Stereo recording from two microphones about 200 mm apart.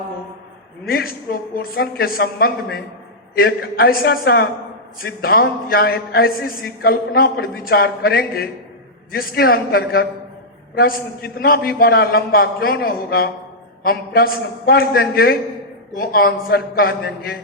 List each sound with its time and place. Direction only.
0.9 s a man's voice: 50° left (ahead or behind)